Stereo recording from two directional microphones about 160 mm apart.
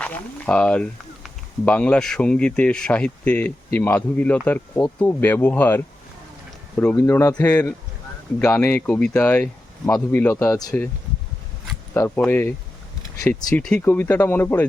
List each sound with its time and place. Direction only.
0.0 s speech: 10° left (ahead or behind)
11.9 s speech: 10° left (ahead or behind)